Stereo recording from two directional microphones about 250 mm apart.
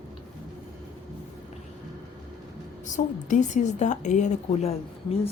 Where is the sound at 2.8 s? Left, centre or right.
Left.